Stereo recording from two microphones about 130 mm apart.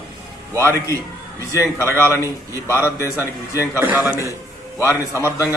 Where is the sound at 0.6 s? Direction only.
20° left (ahead or behind).